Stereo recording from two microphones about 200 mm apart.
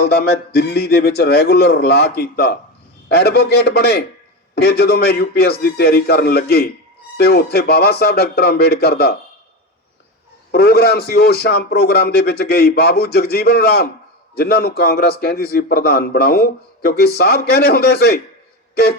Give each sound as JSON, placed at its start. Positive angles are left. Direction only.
{"t": 0.0, "sound": "a man's voice", "side_deg": 55}
{"t": 10.5, "sound": "a man's voice", "side_deg": 50}